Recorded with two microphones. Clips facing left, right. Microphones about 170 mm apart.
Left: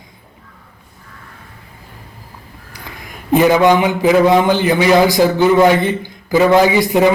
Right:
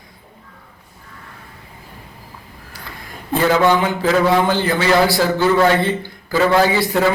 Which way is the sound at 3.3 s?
15° left (ahead or behind).